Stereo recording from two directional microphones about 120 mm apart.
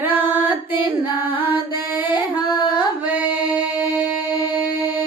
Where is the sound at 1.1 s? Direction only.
20° right (ahead or behind).